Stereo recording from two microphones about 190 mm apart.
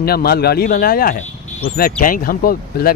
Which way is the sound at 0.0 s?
55° left (ahead or behind).